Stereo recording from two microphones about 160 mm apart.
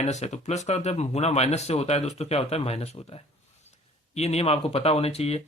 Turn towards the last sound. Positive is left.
turn(degrees=40)  # may be behind; listen again after turning